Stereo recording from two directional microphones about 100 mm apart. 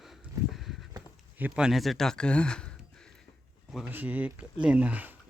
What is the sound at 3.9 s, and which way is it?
Speech, 20° right (ahead or behind).